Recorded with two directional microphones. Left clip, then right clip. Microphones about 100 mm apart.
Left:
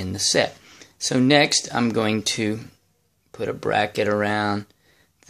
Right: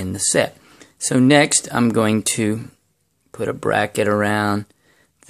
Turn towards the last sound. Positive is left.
turn(degrees=-55)  # may be behind; listen again after turning